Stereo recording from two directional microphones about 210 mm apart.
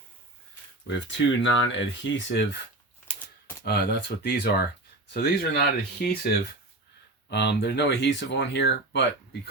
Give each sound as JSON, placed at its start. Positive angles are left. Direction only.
{"t": 0.9, "sound": "speech", "side_deg": 55}
{"t": 3.6, "sound": "speech", "side_deg": 45}
{"t": 7.3, "sound": "speech", "side_deg": 55}